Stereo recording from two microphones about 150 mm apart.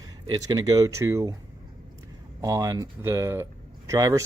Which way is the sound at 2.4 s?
25° right (ahead or behind).